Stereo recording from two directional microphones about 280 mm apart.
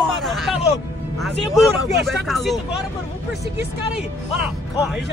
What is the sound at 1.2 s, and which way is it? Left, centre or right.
Speech, centre.